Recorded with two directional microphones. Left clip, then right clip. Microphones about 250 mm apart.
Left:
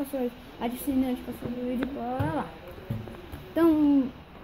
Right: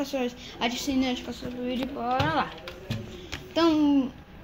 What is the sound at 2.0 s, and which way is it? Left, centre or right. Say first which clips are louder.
Sizzle: right 9 dB; centre.